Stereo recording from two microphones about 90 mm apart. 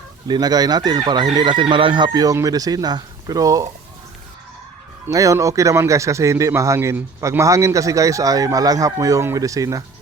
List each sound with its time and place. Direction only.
0.3 s speech: 50° right (ahead or behind); by 2.0 s 65° right (ahead or behind)
2.1 s speech: 40° right (ahead or behind)
5.1 s a man's voice: 40° right (ahead or behind)